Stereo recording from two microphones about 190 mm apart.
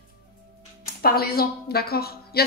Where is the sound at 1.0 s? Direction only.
55° left (ahead or behind).